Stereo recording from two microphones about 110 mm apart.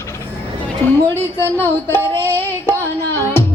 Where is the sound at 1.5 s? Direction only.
20° left (ahead or behind).